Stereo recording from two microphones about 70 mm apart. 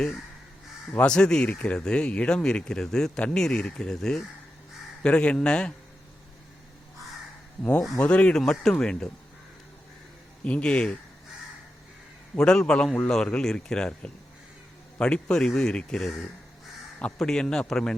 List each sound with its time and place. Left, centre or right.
1.0 s speech: centre
7.6 s speech: centre
8.4 s speech: centre
10.4 s speech: centre
12.4 s speech: centre
17.2 s speech: centre